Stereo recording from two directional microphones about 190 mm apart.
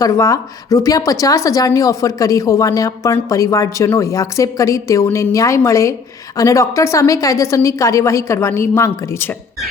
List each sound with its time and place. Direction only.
0.0 s a woman's voice: 15° left (ahead or behind)